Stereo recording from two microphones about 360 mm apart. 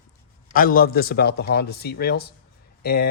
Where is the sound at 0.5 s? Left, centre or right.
Left.